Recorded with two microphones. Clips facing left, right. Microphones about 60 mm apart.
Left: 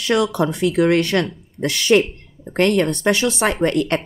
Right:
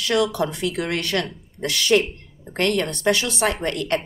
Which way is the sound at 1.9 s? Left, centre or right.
Left.